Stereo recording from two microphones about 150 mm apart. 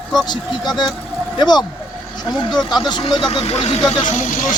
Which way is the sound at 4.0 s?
55° left (ahead or behind).